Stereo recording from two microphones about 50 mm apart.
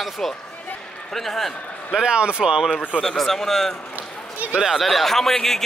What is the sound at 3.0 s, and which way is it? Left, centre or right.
A man's voice, centre.